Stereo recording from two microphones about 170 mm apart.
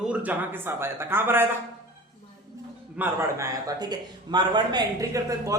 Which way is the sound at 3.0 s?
15° right (ahead or behind).